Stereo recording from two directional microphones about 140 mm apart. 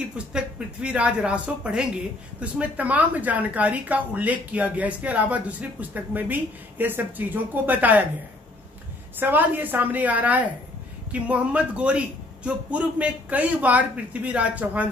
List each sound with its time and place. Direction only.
0.8 s speech: 5° right (ahead or behind)
9.2 s speech: 15° right (ahead or behind)